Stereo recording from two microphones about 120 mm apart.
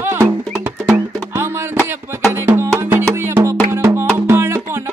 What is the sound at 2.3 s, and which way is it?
Music, 20° right (ahead or behind).